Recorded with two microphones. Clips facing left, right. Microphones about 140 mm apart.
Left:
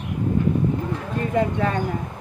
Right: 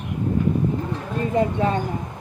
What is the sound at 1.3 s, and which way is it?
Speech, 20° right (ahead or behind).